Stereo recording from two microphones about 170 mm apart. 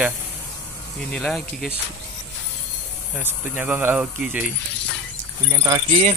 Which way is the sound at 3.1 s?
10° right (ahead or behind).